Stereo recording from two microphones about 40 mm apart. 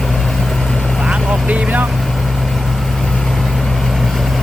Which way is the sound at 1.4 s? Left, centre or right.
Right.